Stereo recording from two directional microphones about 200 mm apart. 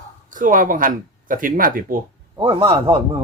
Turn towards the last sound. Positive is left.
turn(degrees=-25)  # may be behind; listen again after turning